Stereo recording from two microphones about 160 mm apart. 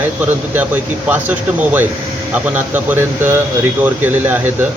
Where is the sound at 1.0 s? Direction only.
10° right (ahead or behind).